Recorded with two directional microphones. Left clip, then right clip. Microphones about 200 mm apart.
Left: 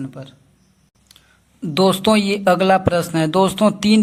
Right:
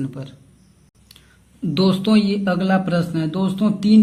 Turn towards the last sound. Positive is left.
turn(degrees=40)  # may be behind; listen again after turning